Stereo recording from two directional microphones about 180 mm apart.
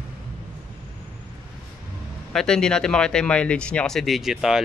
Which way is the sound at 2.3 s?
5° left (ahead or behind).